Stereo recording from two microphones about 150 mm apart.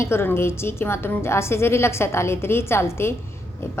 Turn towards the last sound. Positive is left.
turn(degrees=15)  # may be behind; listen again after turning